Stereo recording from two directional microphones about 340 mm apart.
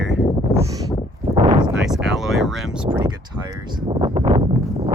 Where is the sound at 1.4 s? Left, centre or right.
Centre.